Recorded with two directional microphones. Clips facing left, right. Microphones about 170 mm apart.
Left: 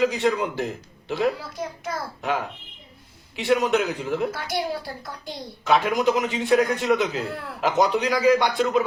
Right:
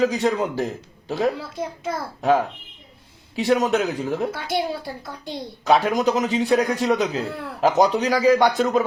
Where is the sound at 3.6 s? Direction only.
35° right (ahead or behind).